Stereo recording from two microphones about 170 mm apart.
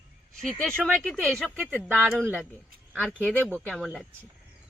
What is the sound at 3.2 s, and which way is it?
Speech, 5° left (ahead or behind).